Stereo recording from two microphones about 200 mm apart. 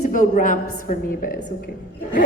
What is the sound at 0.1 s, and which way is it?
A woman's voice, 40° left (ahead or behind).